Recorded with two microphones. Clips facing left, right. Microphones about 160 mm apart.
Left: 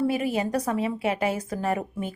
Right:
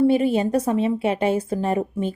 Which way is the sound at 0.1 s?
25° right (ahead or behind).